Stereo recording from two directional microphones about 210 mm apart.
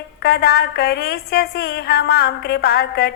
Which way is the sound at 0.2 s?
45° left (ahead or behind).